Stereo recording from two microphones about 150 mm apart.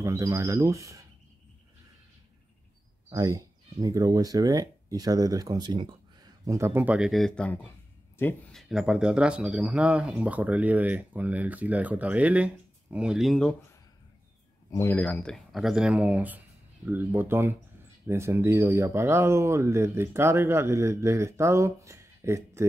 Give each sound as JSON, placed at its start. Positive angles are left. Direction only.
{"t": 0.0, "sound": "speech", "side_deg": -20}
{"t": 3.1, "sound": "speech", "side_deg": -25}
{"t": 8.5, "sound": "speech", "side_deg": 0}
{"t": 14.7, "sound": "speech", "side_deg": 15}